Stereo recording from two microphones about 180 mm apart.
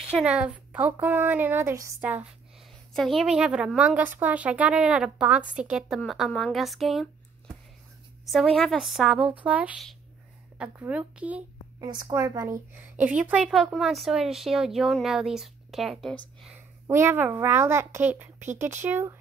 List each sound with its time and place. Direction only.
0.2 s a woman's voice: 5° right (ahead or behind)
8.3 s a woman's voice: centre (ahead or behind)
11.8 s a woman's voice: 20° right (ahead or behind)
13.0 s a woman's voice: 5° right (ahead or behind)
16.8 s a child's voice: 15° right (ahead or behind)